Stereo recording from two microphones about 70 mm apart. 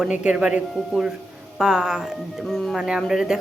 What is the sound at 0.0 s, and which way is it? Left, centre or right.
Speech, centre.